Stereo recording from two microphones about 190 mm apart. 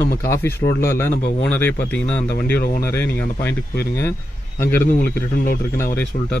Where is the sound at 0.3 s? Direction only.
15° left (ahead or behind).